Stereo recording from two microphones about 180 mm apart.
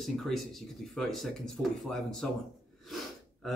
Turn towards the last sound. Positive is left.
turn(degrees=0)  # may be behind; listen again after turning